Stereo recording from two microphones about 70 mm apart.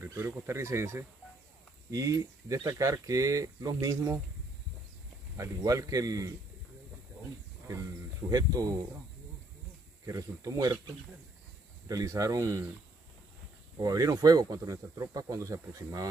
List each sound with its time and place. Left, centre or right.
0.5 s speech: right
1.9 s speech: right
5.4 s a man's voice: right
8.3 s a man's voice: right
10.0 s speech: right
11.9 s a man's voice: right
13.7 s speech: right